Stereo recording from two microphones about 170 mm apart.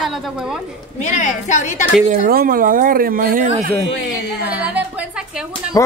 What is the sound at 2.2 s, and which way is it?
Speech, 55° right (ahead or behind).